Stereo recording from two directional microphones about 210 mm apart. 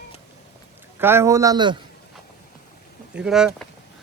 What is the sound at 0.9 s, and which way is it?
Speech, 10° right (ahead or behind).